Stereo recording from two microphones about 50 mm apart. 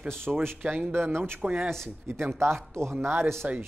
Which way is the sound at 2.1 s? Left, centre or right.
Right.